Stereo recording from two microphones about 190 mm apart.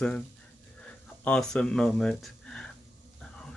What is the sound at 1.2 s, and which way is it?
Speech, 5° left (ahead or behind).